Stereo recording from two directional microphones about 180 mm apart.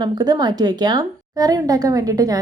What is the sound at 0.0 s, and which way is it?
A woman's voice, 25° right (ahead or behind).